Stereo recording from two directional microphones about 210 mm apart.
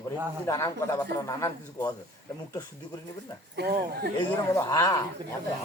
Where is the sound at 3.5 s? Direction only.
50° right (ahead or behind).